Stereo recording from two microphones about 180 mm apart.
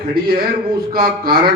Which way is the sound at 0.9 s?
55° right (ahead or behind).